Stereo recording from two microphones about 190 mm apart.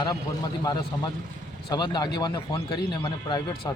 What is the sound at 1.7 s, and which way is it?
A man's voice, 20° left (ahead or behind).